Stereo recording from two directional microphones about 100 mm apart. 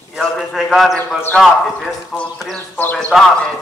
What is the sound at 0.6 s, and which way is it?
Speech, 5° right (ahead or behind).